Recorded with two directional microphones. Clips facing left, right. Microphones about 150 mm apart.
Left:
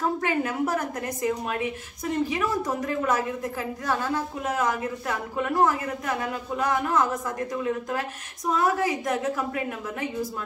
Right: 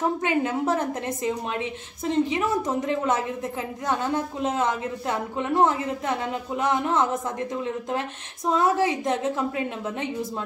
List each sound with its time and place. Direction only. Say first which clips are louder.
0.2 s a woman's voice: right 2 dB; 20° right (ahead or behind)